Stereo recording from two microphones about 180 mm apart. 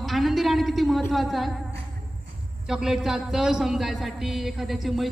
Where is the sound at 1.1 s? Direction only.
Centre (ahead or behind).